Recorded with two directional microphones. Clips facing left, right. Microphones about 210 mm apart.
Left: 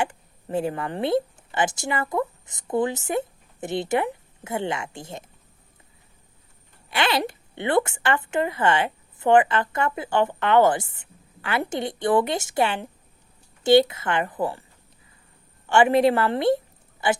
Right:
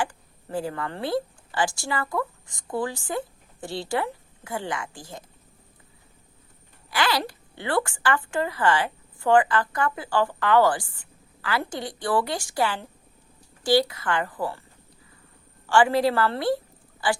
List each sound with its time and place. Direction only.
0.0 s speech: 25° left (ahead or behind)
6.9 s speech: 25° left (ahead or behind)
15.6 s speech: 20° left (ahead or behind)